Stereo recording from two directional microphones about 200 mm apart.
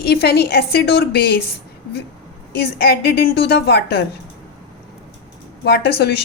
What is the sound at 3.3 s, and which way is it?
Speech, 50° left (ahead or behind).